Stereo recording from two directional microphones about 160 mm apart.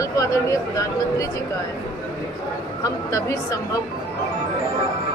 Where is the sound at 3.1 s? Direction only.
20° left (ahead or behind).